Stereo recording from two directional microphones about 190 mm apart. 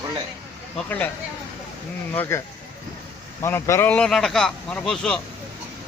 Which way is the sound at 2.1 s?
10° left (ahead or behind).